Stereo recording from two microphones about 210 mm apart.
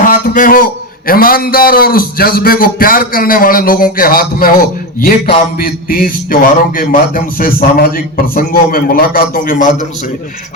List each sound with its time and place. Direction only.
0.0 s a man's voice: 40° left (ahead or behind)